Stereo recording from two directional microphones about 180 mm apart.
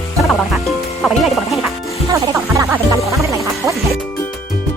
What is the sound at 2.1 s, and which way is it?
Music, 15° right (ahead or behind).